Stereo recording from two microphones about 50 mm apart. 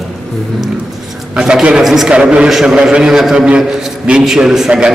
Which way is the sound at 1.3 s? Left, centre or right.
Centre.